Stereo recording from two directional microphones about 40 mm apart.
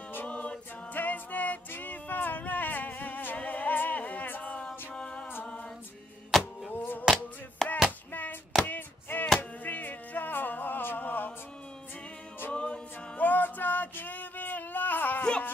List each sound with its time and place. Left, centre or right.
0.3 s a capella: left
0.9 s a capella: left
1.7 s music: left
4.4 s music: left
6.3 s music: centre
6.7 s music: left
7.6 s a sound: centre
8.1 s a sound: left
12.5 s a capella: left
13.2 s a sound: left